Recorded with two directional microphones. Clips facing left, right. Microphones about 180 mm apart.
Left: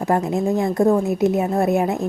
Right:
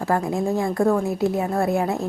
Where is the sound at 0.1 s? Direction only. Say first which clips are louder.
Left 3 dB; 20° left (ahead or behind).